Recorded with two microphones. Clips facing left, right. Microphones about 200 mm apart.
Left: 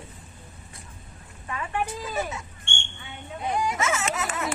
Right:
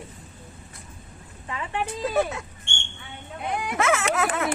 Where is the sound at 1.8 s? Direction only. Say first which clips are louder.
Right 6 dB; 60° right (ahead or behind).